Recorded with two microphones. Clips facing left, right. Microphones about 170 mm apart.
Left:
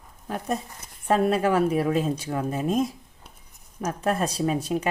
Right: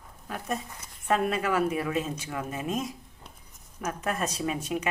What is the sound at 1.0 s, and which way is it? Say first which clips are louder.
Speech: left 5 dB; 35° left (ahead or behind).